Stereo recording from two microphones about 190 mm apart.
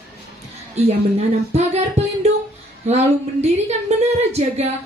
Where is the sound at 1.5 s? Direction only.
35° right (ahead or behind).